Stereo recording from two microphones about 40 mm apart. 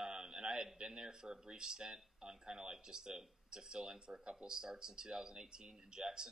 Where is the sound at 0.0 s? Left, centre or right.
Centre.